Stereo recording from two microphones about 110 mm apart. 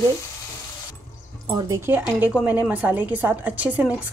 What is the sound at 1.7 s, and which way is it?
A woman's voice, 20° right (ahead or behind).